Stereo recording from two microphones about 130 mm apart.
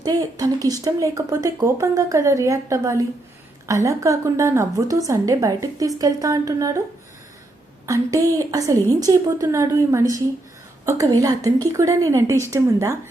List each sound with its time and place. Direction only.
0.0 s speech: 30° right (ahead or behind)
7.9 s speech: 25° right (ahead or behind)